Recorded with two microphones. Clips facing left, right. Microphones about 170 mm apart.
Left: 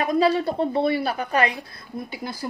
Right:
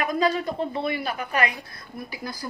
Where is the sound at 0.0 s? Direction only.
30° left (ahead or behind).